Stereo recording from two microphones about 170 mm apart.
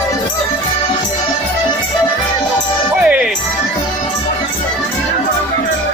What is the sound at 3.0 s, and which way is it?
Music, 5° right (ahead or behind).